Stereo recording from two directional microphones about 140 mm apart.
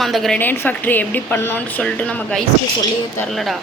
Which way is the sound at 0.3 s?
15° left (ahead or behind).